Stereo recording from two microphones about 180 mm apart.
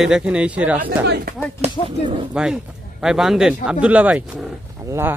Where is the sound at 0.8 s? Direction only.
65° right (ahead or behind).